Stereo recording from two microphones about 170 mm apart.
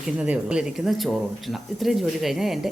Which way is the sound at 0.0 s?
5° right (ahead or behind).